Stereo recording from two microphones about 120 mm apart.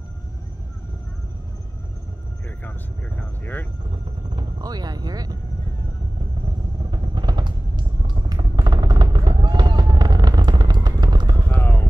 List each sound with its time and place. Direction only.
4.4 s speech: 35° right (ahead or behind)
6.9 s vehicle: 35° right (ahead or behind)
11.5 s vehicle: 20° left (ahead or behind)